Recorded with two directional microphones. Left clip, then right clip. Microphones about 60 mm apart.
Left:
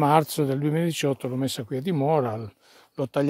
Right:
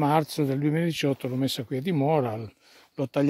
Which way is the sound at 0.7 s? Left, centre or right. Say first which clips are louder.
Left 1 dB; left.